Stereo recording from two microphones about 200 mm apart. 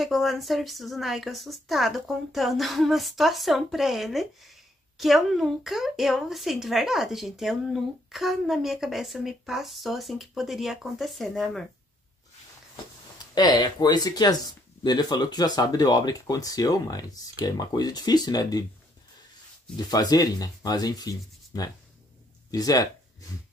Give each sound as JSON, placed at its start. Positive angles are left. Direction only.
{"t": 0.0, "sound": "speech", "side_deg": 0}
{"t": 13.3, "sound": "speech", "side_deg": 20}
{"t": 19.9, "sound": "speech", "side_deg": 20}